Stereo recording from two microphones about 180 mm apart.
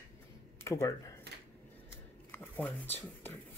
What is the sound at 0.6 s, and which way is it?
Speech, 15° left (ahead or behind).